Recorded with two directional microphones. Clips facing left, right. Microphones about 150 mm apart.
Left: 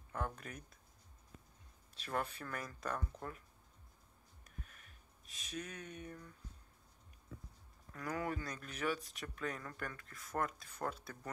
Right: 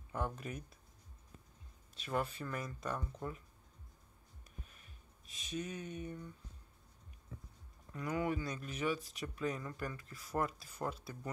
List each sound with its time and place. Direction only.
0.1 s speech: 5° right (ahead or behind)
2.0 s speech: centre (ahead or behind)
5.2 s speech: centre (ahead or behind)
7.9 s speech: 20° right (ahead or behind)
8.5 s speech: centre (ahead or behind)
10.0 s speech: 30° right (ahead or behind)
10.7 s speech: 5° right (ahead or behind)